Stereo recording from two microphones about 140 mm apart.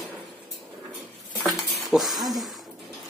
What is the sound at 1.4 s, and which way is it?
Dishes, centre (ahead or behind).